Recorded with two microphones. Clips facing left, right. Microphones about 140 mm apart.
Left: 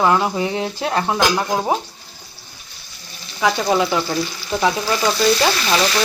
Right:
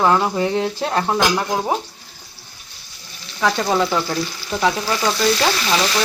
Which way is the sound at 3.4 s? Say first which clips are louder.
Left 1 dB; 10° left (ahead or behind).